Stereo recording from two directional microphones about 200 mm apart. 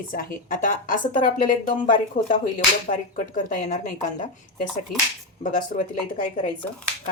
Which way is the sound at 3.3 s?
40° left (ahead or behind).